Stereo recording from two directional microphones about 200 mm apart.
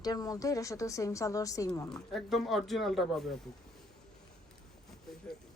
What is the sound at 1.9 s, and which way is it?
Speech, centre (ahead or behind).